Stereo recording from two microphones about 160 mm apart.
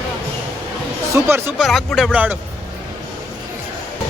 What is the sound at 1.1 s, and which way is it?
Speech, 15° right (ahead or behind).